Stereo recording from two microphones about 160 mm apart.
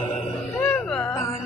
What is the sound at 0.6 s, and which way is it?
Music, 15° left (ahead or behind).